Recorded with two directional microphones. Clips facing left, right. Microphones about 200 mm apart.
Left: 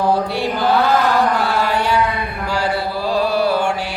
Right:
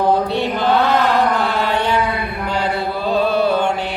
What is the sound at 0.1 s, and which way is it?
Chant, 20° right (ahead or behind).